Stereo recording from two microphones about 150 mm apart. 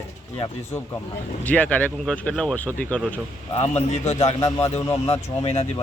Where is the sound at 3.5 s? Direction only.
45° left (ahead or behind).